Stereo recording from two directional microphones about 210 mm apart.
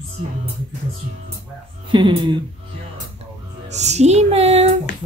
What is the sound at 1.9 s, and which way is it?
Speech, 25° right (ahead or behind).